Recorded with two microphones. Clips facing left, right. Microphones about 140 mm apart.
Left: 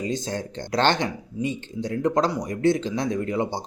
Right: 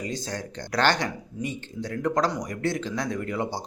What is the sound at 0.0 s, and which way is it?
Speech, 25° left (ahead or behind).